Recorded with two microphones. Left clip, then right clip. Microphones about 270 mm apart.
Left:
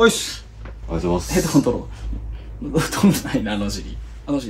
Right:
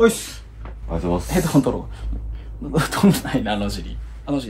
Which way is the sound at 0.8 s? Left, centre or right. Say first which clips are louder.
Left 1 dB; centre.